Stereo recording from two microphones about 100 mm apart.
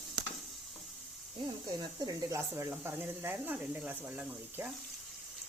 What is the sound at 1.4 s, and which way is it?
Speech, 50° right (ahead or behind).